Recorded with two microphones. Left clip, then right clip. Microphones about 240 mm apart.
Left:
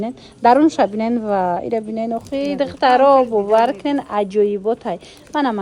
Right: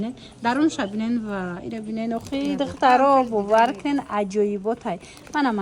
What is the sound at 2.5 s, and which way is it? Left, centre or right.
Speech, right.